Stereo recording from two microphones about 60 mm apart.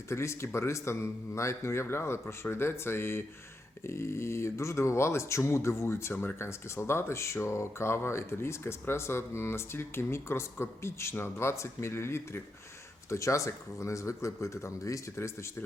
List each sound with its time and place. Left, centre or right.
0.1 s speech: left
6.5 s speech: left
13.1 s speech: left